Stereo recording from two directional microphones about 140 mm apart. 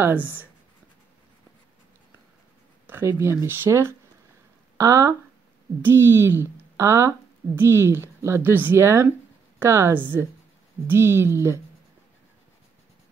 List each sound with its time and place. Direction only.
0.0 s a woman's voice: 15° right (ahead or behind)
2.9 s a woman's voice: 20° right (ahead or behind)